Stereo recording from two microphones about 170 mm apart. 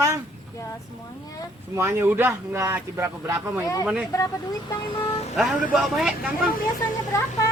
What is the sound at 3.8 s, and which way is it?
Speech, 5° right (ahead or behind).